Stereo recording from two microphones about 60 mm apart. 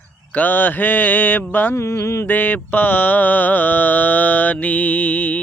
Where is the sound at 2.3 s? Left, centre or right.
Left.